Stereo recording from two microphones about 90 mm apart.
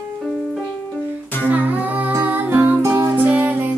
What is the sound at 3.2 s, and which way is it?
Music, 20° right (ahead or behind).